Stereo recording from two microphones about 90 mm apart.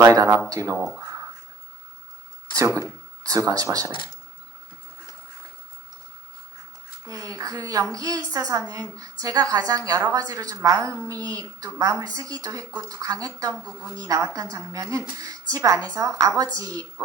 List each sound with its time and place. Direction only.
0.0 s a woman's voice: 35° right (ahead or behind)
3.2 s a woman's voice: 40° right (ahead or behind)
7.1 s a woman's voice: 40° right (ahead or behind)
13.6 s a woman's voice: 15° left (ahead or behind)
14.5 s a woman's voice: 40° right (ahead or behind)